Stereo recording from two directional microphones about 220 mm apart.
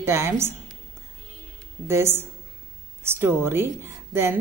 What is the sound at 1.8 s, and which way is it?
A woman's voice, 10° right (ahead or behind).